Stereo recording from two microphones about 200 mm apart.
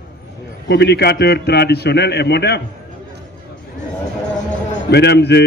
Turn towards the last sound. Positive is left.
turn(degrees=55)  # may be behind; listen again after turning